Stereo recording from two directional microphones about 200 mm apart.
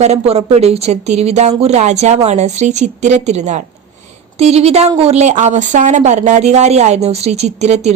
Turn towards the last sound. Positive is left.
turn(degrees=-35)  # may be behind; listen again after turning